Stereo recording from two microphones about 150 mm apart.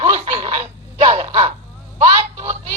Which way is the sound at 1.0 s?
50° right (ahead or behind).